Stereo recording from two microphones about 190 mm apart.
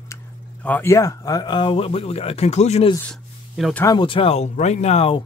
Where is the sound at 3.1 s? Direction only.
Centre (ahead or behind).